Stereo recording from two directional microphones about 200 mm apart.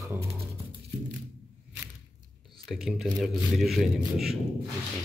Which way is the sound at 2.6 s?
Centre (ahead or behind).